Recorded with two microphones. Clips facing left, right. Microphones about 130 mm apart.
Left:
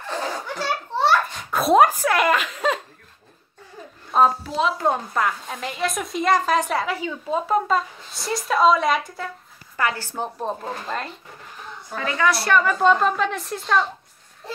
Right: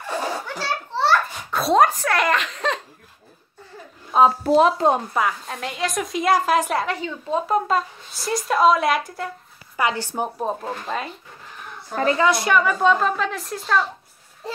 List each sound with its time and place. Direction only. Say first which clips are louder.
0.0 s children playing: right 2 dB; 10° right (ahead or behind)
0.6 s a sound: left 2 dB; 15° left (ahead or behind)
1.6 s speech: left 1 dB; 5° left (ahead or behind)
4.4 s speech: right 7 dB; 50° right (ahead or behind)
4.7 s a woman's voice: right 3 dB; 20° right (ahead or behind)
5.1 s a woman's voice: right 1 dB; centre (ahead or behind)
9.8 s speech: right 2 dB; 15° right (ahead or behind)
11.9 s a woman's voice: right 7 dB; 35° right (ahead or behind)
12.2 s a woman's voice: left 2 dB; 20° right (ahead or behind)
12.5 s a woman's voice: even; 5° right (ahead or behind)